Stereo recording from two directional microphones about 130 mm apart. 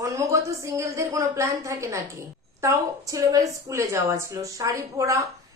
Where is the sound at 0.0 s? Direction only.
25° right (ahead or behind).